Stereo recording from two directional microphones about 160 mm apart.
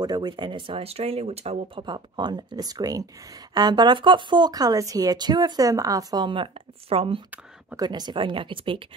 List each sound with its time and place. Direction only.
0.0 s speech: 25° right (ahead or behind); by 1.9 s 40° right (ahead or behind)
1.9 s speech: 30° right (ahead or behind)